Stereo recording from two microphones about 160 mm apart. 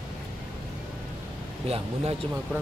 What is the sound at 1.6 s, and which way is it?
Speech, 40° right (ahead or behind).